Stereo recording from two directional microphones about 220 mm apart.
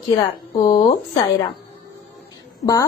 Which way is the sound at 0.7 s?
20° left (ahead or behind).